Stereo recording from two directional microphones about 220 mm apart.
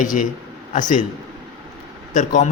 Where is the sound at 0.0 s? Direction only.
35° left (ahead or behind).